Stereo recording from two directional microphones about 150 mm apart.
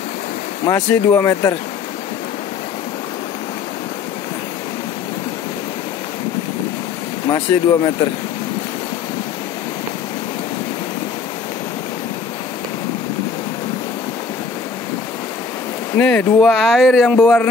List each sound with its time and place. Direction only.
0.7 s speech: 20° left (ahead or behind)
7.2 s speech: 25° left (ahead or behind)
16.0 s speech: 10° left (ahead or behind)